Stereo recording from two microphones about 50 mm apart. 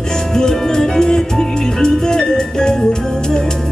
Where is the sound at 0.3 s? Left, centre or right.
Centre.